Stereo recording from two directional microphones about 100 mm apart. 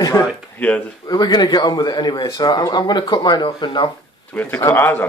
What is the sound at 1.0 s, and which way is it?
Speech, 45° left (ahead or behind).